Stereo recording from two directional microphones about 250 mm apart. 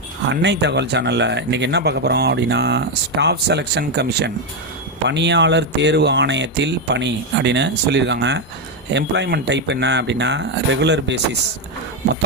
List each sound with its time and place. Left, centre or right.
0.3 s speech: right